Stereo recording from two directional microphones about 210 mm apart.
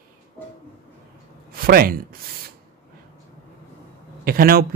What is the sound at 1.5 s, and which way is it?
Speech, 45° right (ahead or behind).